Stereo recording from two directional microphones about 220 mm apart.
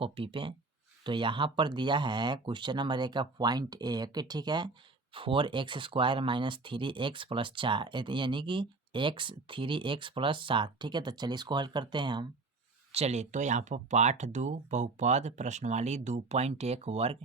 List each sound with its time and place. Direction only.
0.0 s speech: 25° right (ahead or behind)